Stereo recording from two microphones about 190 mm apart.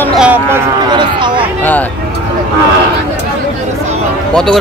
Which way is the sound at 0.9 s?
25° right (ahead or behind).